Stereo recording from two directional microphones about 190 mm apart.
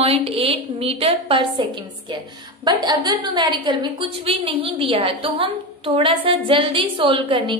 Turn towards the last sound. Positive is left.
turn(degrees=-25)  # may be behind; listen again after turning